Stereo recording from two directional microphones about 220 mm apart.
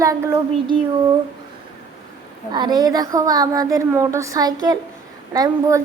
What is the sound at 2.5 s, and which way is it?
A woman's voice, 20° right (ahead or behind).